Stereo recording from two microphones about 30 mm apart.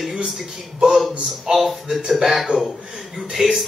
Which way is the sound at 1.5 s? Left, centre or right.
Right.